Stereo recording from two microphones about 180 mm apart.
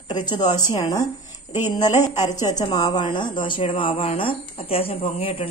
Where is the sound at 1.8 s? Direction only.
40° left (ahead or behind).